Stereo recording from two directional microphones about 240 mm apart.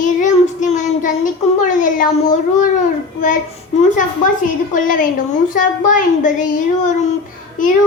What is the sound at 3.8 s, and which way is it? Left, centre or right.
Speech, left.